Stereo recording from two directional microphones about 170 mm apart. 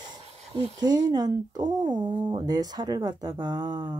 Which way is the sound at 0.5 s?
25° right (ahead or behind).